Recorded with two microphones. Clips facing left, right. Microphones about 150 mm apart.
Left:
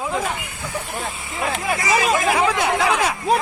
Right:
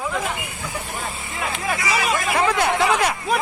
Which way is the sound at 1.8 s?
40° left (ahead or behind).